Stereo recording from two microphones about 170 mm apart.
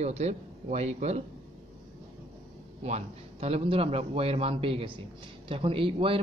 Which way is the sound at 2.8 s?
40° right (ahead or behind).